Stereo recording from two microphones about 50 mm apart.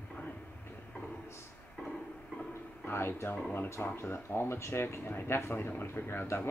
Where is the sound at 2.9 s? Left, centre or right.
Left.